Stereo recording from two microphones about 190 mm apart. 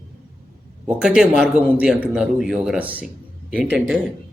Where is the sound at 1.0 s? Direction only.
5° right (ahead or behind).